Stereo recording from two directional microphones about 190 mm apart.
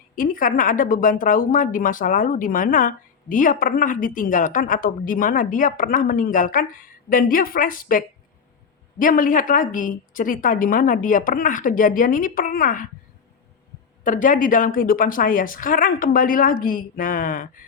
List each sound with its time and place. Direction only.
0.2 s a woman's voice: 45° left (ahead or behind)
14.0 s a woman's voice: 45° left (ahead or behind)